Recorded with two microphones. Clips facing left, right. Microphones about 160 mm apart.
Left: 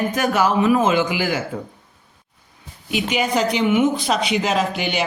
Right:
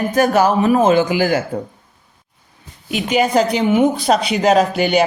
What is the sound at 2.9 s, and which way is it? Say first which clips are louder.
Speech: right 5 dB; 40° right (ahead or behind).